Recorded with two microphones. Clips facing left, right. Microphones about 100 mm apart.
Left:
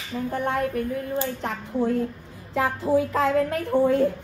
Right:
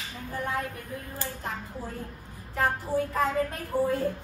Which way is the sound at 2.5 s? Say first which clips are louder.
Left 6 dB; 90° left.